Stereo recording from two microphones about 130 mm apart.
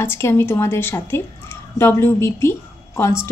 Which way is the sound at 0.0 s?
20° left (ahead or behind).